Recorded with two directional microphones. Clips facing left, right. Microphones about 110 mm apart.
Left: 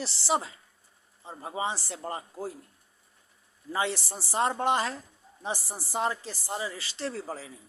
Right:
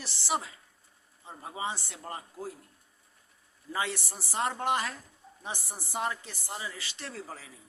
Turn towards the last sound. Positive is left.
turn(degrees=30)  # may be behind; listen again after turning